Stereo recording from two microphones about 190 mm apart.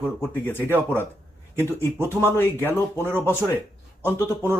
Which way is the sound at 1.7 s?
15° left (ahead or behind).